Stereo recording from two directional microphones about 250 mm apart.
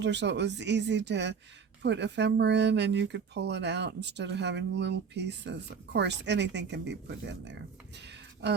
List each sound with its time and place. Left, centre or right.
0.0 s speech: right